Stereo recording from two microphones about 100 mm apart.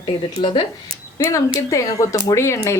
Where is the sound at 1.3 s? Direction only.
35° left (ahead or behind).